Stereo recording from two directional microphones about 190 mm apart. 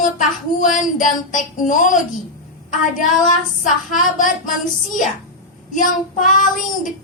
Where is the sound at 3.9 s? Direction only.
45° left (ahead or behind).